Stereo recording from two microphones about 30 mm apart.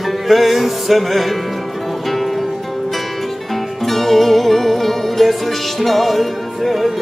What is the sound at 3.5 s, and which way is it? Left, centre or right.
Music, centre.